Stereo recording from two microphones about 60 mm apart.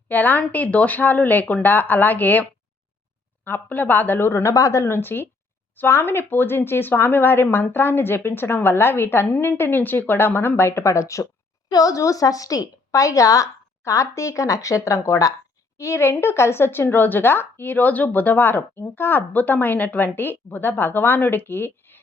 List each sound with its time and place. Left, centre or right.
0.1 s a woman's voice: left
4.4 s speech: left
4.9 s a woman's voice: left
11.7 s a woman's voice: left